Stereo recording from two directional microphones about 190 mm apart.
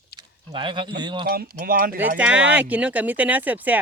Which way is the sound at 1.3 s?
50° right (ahead or behind).